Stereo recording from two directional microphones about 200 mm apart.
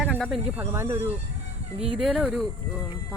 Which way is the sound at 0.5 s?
10° right (ahead or behind).